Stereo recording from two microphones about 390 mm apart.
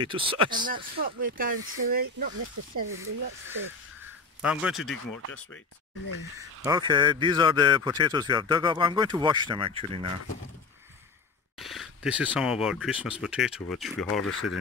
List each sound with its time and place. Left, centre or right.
0.0 s speech: centre
4.4 s speech: centre
6.6 s speech: centre
11.5 s speech: centre